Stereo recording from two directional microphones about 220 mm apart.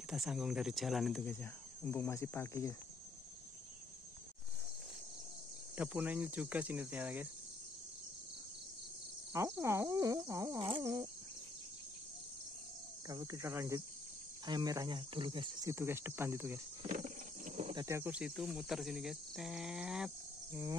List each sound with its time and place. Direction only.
0.1 s speech: centre (ahead or behind)
5.8 s speech: 5° right (ahead or behind)
9.3 s speech: 15° right (ahead or behind)
13.1 s speech: 15° right (ahead or behind)
16.8 s a sound: 35° right (ahead or behind)
17.8 s speech: 10° right (ahead or behind)